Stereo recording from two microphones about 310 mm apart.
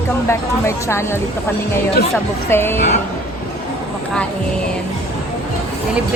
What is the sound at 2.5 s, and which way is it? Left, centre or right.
Speech, centre.